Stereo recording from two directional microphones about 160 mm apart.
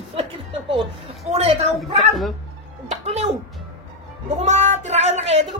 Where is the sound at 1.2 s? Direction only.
40° right (ahead or behind).